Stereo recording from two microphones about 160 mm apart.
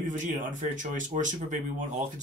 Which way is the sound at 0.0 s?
50° right (ahead or behind).